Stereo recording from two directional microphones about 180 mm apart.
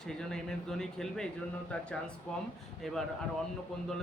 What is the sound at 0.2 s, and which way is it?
A man's voice, centre (ahead or behind).